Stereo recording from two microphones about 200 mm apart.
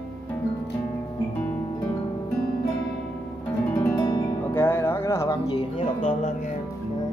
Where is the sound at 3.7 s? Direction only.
20° left (ahead or behind).